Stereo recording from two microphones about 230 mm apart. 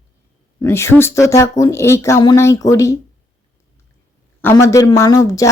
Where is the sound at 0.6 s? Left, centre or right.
Centre.